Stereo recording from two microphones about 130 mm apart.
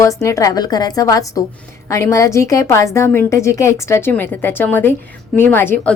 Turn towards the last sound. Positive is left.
turn(degrees=15)  # may be behind; listen again after turning